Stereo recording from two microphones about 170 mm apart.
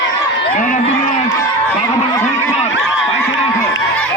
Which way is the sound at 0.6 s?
50° left (ahead or behind).